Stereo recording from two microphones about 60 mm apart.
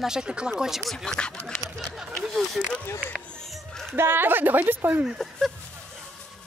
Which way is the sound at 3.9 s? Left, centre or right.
Right.